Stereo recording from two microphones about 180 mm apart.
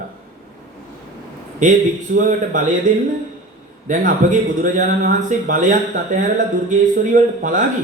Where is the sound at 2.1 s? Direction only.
50° right (ahead or behind).